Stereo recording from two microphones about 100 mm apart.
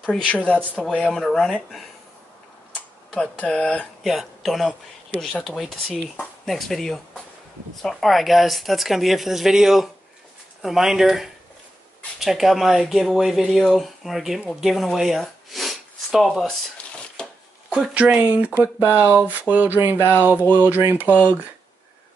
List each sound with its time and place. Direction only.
0.5 s speech: 15° right (ahead or behind)
1.1 s speech: 5° left (ahead or behind)
3.1 s speech: 5° left (ahead or behind)
4.0 s speech: centre (ahead or behind)
14.5 s sniff: centre (ahead or behind)
17.6 s speech: 10° right (ahead or behind)